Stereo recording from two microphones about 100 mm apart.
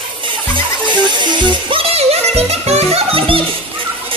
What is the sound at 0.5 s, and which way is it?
Music, 50° right (ahead or behind).